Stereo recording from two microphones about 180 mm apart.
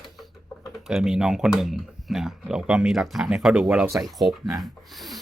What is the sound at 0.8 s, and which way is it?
Speech, centre (ahead or behind).